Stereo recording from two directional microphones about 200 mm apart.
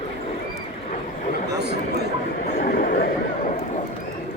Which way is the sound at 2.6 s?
50° left (ahead or behind).